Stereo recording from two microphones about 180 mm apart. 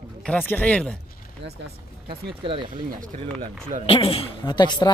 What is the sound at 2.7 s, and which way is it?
Speech, 45° right (ahead or behind).